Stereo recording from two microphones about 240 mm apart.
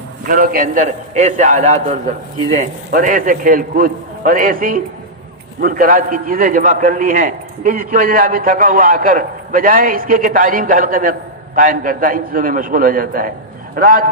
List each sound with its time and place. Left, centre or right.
0.3 s a man's voice: right